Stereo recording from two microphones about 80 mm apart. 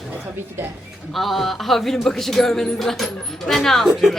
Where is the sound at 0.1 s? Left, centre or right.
Right.